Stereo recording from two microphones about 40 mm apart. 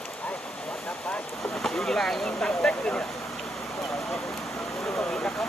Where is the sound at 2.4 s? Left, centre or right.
Left.